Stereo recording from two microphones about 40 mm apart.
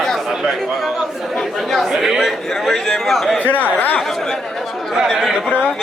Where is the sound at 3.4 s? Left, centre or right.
Left.